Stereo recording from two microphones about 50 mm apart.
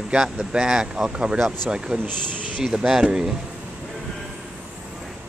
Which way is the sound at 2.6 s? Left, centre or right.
Centre.